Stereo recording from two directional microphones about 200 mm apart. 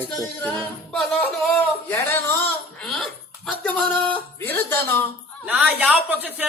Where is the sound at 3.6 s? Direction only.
5° left (ahead or behind).